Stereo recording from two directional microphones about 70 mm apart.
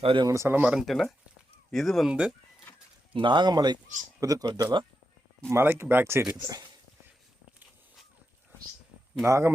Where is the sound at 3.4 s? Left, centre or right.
Right.